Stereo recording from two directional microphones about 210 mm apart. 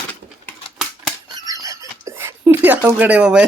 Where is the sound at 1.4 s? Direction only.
15° right (ahead or behind).